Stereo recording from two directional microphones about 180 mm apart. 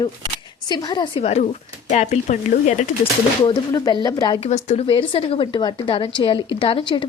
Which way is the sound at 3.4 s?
20° left (ahead or behind).